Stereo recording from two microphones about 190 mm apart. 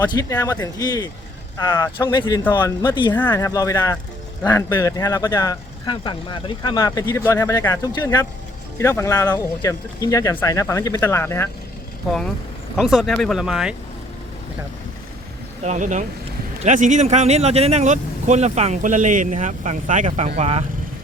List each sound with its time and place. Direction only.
0.0 s speech: 20° left (ahead or behind)
12.7 s speech: centre (ahead or behind)
15.6 s speech: 40° right (ahead or behind)